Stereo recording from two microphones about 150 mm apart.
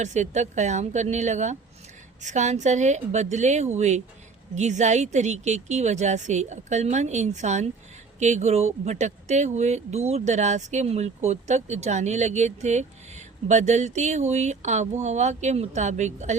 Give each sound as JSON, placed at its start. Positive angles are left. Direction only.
{"t": 0.0, "sound": "speech", "side_deg": -50}